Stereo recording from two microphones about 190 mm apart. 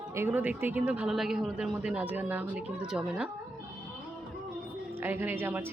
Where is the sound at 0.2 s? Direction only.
10° right (ahead or behind).